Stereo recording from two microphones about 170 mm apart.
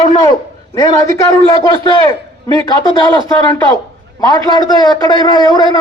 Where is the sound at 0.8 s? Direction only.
20° left (ahead or behind).